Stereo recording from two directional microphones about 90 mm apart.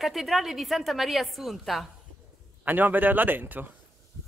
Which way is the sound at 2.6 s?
20° right (ahead or behind).